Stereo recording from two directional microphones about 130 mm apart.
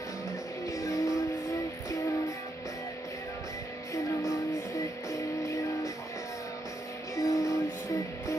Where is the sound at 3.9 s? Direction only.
25° left (ahead or behind).